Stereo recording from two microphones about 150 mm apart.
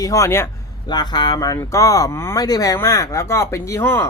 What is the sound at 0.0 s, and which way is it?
Speech, 20° left (ahead or behind).